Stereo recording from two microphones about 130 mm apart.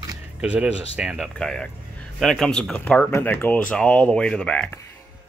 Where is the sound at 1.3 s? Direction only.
5° left (ahead or behind).